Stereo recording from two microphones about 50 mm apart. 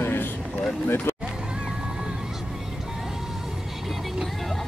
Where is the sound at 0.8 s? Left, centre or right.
Left.